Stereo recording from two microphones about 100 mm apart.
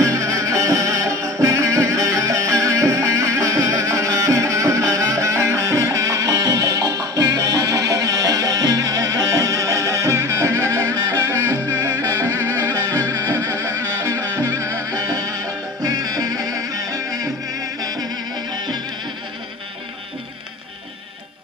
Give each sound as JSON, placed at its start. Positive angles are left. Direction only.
{"t": 0.0, "sound": "music", "side_deg": -30}